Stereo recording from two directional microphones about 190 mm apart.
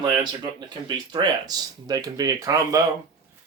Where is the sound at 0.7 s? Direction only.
25° right (ahead or behind).